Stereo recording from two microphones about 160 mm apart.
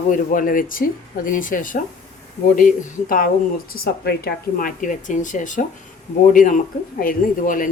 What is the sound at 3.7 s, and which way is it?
Speech, 80° left.